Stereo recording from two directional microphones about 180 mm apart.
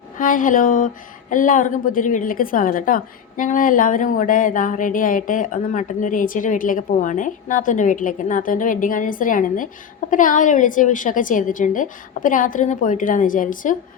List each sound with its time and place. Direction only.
0.2 s a woman's voice: 50° left (ahead or behind)